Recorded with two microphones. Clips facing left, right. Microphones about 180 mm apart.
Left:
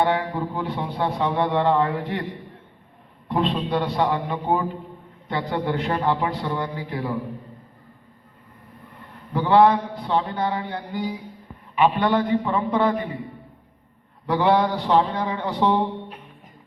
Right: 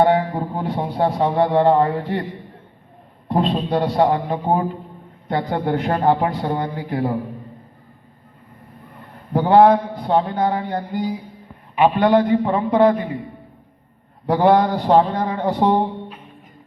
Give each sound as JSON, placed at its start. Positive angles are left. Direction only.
{"t": 0.0, "sound": "a man's voice", "side_deg": -40}
{"t": 3.2, "sound": "a man's voice", "side_deg": -40}
{"t": 9.3, "sound": "a man's voice", "side_deg": -45}
{"t": 14.3, "sound": "a man's voice", "side_deg": -45}